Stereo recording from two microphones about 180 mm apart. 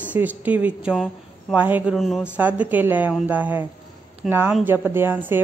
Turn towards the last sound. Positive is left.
turn(degrees=-10)  # may be behind; listen again after turning